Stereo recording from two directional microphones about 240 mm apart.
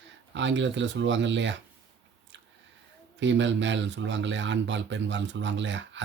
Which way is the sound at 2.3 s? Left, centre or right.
Right.